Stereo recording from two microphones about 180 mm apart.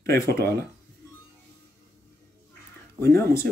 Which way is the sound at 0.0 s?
60° right (ahead or behind).